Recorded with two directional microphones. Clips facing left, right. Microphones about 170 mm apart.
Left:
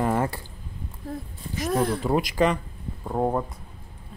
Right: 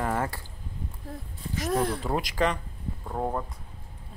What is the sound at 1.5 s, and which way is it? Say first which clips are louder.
Speech: left 3 dB; 10° left (ahead or behind).